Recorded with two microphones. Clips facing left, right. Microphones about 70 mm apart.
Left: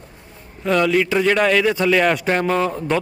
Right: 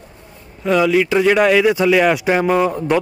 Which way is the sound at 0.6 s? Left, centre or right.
Centre.